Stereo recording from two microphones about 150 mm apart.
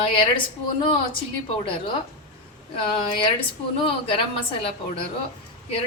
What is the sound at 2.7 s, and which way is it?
A woman's voice, 35° left (ahead or behind).